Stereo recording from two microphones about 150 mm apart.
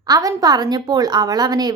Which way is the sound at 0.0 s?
25° right (ahead or behind).